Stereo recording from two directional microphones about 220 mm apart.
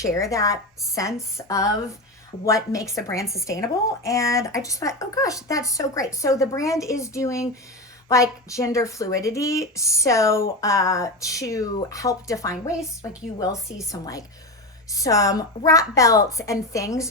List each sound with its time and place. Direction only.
0.0 s speech: 15° left (ahead or behind)